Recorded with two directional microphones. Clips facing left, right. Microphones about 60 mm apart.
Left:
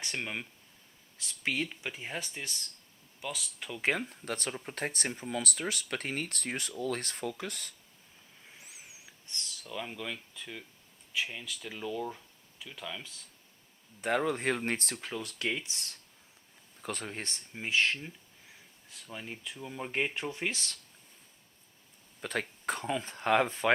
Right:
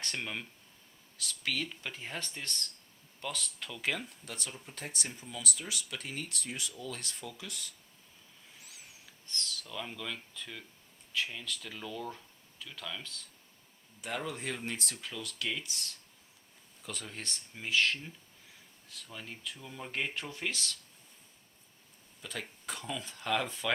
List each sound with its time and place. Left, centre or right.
0.0 s speech: centre
1.2 s speech: left
1.8 s speech: centre
3.8 s speech: left
8.6 s a sound: centre
11.1 s speech: centre
14.0 s speech: left
22.2 s speech: left